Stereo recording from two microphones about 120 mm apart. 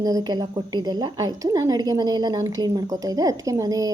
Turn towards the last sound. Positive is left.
turn(degrees=-30)  # may be behind; listen again after turning